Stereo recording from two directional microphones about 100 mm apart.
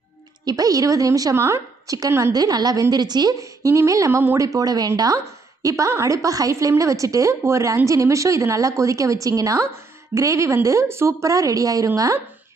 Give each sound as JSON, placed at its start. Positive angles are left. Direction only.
{"t": 0.5, "sound": "a woman's voice", "side_deg": -35}